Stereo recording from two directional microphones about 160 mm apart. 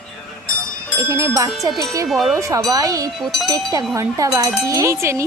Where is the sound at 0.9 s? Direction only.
20° right (ahead or behind).